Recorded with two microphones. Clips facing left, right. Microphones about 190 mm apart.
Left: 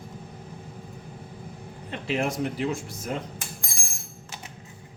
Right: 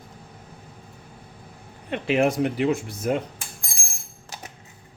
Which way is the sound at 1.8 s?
70° right (ahead or behind).